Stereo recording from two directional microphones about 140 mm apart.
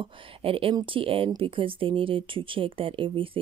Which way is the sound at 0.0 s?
40° right (ahead or behind).